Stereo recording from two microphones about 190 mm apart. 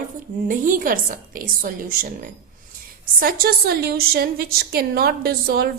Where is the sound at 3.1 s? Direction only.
50° right (ahead or behind).